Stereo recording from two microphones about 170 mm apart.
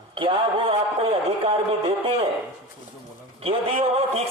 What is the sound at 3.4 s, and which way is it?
Speech, 35° right (ahead or behind).